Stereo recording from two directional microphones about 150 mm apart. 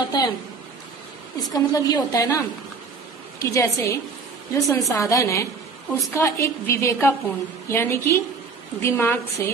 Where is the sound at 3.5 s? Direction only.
20° left (ahead or behind).